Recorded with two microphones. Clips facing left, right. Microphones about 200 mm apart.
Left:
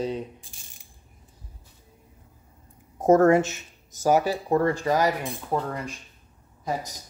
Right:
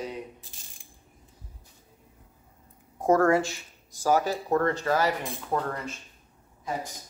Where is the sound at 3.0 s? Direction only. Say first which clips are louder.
Left 4 dB; 20° left (ahead or behind).